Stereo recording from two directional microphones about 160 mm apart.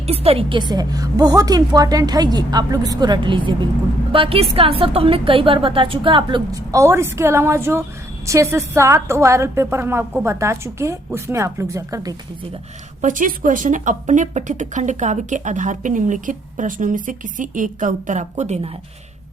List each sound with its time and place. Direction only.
0.1 s a woman's voice: 40° right (ahead or behind); by 12.1 s 20° right (ahead or behind)
13.0 s speech: 55° right (ahead or behind)